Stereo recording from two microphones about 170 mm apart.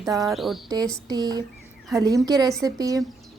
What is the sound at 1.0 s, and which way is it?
A woman's voice, 25° right (ahead or behind).